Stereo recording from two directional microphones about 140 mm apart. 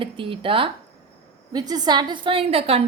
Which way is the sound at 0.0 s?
40° right (ahead or behind).